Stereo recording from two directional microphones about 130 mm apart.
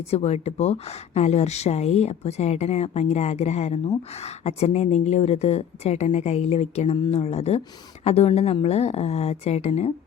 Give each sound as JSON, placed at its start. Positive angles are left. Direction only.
{"t": 0.1, "sound": "a woman's voice", "side_deg": 55}